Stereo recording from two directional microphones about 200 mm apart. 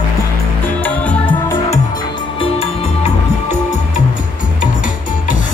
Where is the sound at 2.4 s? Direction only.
30° left (ahead or behind).